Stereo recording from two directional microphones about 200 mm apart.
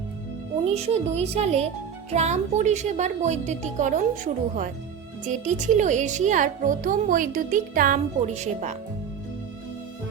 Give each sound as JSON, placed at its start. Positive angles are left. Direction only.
{"t": 0.7, "sound": "speech", "side_deg": -30}